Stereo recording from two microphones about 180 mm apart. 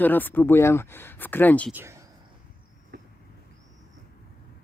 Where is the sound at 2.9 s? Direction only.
65° right (ahead or behind).